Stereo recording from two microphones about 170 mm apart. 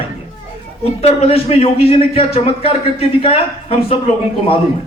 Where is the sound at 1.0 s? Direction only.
35° left (ahead or behind).